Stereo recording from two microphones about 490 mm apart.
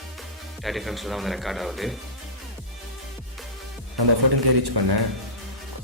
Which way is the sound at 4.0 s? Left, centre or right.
Right.